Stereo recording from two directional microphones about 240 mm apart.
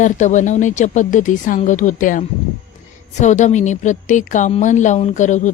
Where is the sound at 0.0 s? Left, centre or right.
Left.